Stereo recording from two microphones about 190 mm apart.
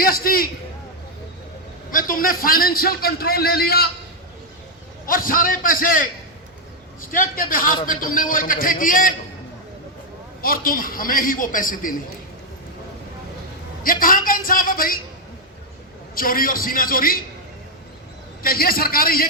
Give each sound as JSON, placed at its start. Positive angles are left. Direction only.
{"t": 0.0, "sound": "a man's voice", "side_deg": 50}
{"t": 1.9, "sound": "a man's voice", "side_deg": 45}
{"t": 5.0, "sound": "a man's voice", "side_deg": 50}
{"t": 10.4, "sound": "a man's voice", "side_deg": 50}
{"t": 13.8, "sound": "a man's voice", "side_deg": 45}
{"t": 16.1, "sound": "a man's voice", "side_deg": 50}
{"t": 18.4, "sound": "a man's voice", "side_deg": 50}